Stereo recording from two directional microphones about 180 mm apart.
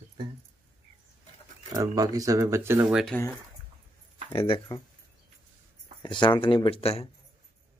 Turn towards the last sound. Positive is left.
turn(degrees=35)  # may be behind; listen again after turning